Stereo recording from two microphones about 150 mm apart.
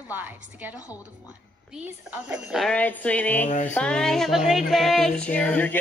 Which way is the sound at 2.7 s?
10° left (ahead or behind).